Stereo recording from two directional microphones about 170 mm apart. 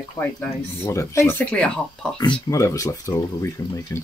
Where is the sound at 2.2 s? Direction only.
20° left (ahead or behind).